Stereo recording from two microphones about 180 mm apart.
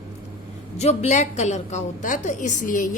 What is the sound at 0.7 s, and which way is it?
A woman's voice, 35° left (ahead or behind).